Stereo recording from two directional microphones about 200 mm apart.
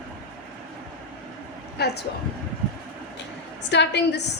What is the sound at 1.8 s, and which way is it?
Speech, 55° left (ahead or behind).